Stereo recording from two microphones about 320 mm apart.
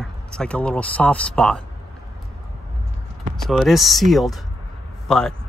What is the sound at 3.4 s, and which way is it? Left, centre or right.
Speech, centre.